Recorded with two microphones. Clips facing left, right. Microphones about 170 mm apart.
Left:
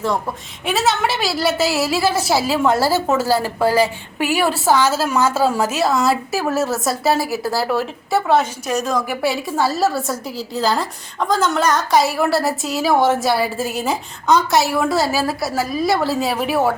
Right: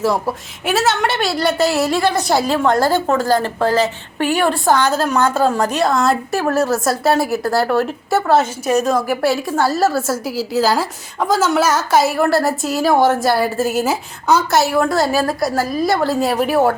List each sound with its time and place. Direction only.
0.6 s a woman's voice: centre (ahead or behind)